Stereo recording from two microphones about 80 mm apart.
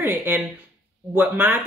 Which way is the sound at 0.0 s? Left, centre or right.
Right.